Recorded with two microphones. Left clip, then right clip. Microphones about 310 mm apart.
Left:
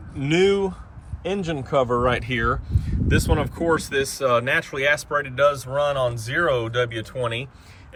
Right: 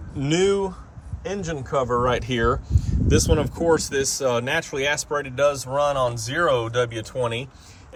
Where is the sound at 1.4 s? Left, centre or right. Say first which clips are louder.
Left 2 dB; centre.